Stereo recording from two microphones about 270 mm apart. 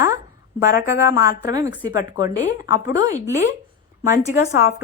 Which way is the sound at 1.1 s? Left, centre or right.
Centre.